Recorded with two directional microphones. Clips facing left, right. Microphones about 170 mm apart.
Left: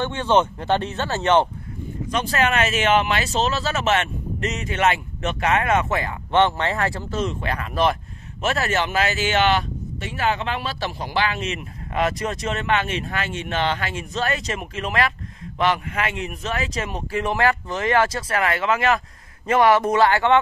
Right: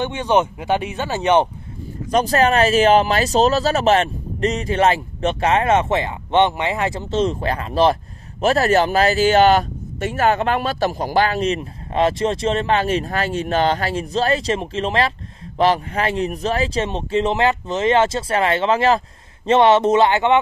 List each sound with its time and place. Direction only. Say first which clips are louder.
0.0 s speech: right 1 dB; 15° right (ahead or behind)
2.0 s speech: right 6 dB; 40° right (ahead or behind); by 20.3 s 20° right (ahead or behind)